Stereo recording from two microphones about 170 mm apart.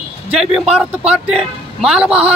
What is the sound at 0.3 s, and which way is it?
A man's voice, 5° right (ahead or behind).